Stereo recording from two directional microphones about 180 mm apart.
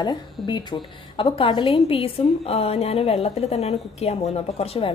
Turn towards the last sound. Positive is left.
turn(degrees=30)  # may be behind; listen again after turning